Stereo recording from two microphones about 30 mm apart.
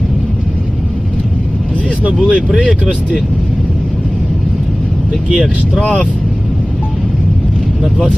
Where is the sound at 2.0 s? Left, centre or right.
Right.